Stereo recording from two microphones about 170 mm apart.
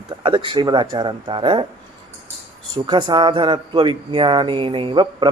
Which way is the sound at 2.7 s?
25° right (ahead or behind).